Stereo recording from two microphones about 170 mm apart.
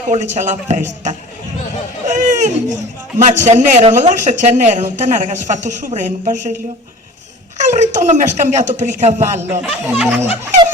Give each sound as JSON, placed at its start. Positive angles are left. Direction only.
{"t": 0.1, "sound": "a woman's voice", "side_deg": -45}
{"t": 2.0, "sound": "a sound", "side_deg": -45}
{"t": 3.2, "sound": "a woman's voice", "side_deg": -45}
{"t": 7.6, "sound": "a woman's voice", "side_deg": -45}
{"t": 9.5, "sound": "speech", "side_deg": -10}